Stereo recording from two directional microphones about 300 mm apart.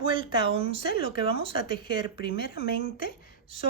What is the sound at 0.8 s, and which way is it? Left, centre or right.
A woman's voice, left.